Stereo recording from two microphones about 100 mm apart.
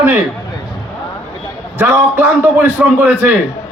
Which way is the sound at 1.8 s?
20° right (ahead or behind).